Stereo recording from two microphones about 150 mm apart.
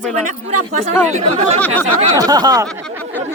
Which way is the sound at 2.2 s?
25° right (ahead or behind).